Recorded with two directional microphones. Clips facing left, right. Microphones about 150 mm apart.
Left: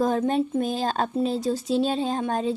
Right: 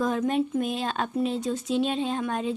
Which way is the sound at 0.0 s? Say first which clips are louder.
Left 2 dB; 35° left (ahead or behind).